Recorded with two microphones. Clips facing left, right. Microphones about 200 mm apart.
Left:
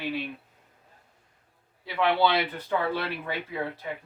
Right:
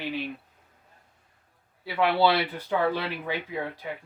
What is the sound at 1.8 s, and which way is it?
Speech, 5° right (ahead or behind).